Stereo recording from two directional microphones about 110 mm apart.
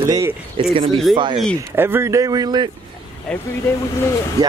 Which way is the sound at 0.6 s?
50° right (ahead or behind).